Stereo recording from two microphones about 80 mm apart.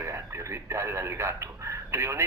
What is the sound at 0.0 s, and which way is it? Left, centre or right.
Speech, right.